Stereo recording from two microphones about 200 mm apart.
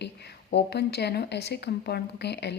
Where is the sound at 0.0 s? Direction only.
55° left (ahead or behind).